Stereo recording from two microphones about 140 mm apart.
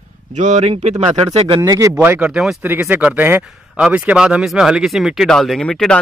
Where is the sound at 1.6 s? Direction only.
25° right (ahead or behind).